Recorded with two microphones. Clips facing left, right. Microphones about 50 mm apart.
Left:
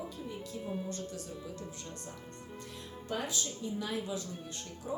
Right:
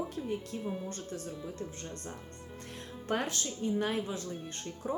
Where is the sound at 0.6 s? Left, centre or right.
Centre.